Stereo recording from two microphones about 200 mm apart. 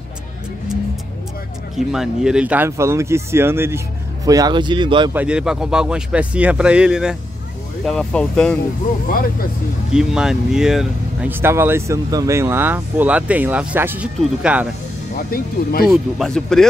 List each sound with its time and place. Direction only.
1.8 s speech: 5° right (ahead or behind); by 5.1 s 25° right (ahead or behind)
5.1 s a man's voice: 5° right (ahead or behind)
9.9 s speech: 5° right (ahead or behind)
15.1 s speech: 45° left (ahead or behind)
15.9 s a man's voice: centre (ahead or behind)